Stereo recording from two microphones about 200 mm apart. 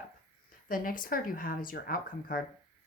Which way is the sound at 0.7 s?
45° left (ahead or behind).